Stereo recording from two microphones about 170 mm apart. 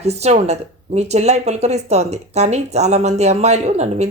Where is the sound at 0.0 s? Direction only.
40° right (ahead or behind).